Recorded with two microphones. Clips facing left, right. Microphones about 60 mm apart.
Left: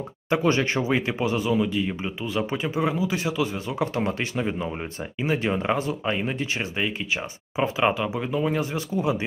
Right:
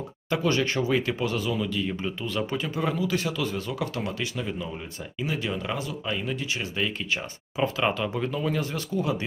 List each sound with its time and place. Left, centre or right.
0.3 s speech: left
6.8 s speech: centre